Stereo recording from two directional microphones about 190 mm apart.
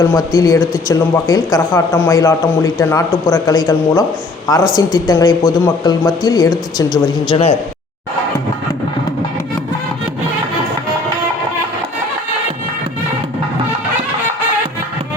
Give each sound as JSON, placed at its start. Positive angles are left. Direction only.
{"t": 0.0, "sound": "speech", "side_deg": 20}